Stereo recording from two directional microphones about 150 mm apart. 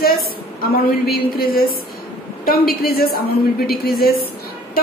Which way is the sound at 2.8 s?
90° left.